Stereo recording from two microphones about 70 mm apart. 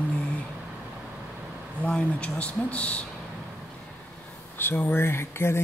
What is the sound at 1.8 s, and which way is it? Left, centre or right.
Speech, centre.